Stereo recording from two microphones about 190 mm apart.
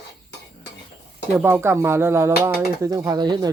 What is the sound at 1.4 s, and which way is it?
Speech, 10° right (ahead or behind).